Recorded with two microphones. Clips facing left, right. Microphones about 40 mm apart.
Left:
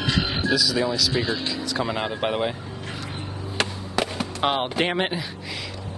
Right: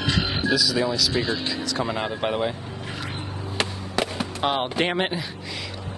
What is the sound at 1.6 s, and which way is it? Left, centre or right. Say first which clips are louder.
Speech: left 1 dB; centre.